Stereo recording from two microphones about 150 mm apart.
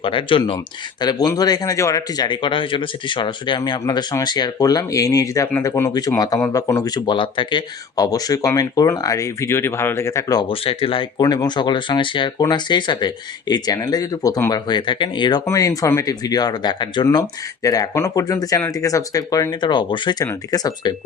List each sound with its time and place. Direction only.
0.0 s speech: 35° left (ahead or behind)
10.5 s speech: 40° left (ahead or behind)
11.2 s speech: 25° left (ahead or behind)